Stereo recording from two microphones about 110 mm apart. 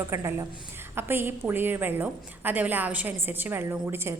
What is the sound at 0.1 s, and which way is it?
A woman's voice, 25° right (ahead or behind).